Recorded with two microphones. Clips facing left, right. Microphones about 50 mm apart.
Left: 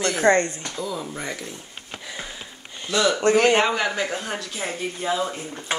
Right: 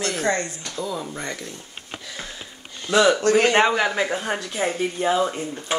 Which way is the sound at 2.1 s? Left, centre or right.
Centre.